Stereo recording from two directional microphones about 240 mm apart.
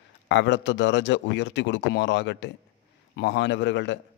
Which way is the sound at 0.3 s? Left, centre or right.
Left.